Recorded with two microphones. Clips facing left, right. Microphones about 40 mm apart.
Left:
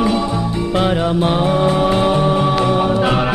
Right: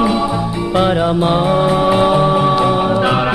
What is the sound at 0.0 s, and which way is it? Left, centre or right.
Music, centre.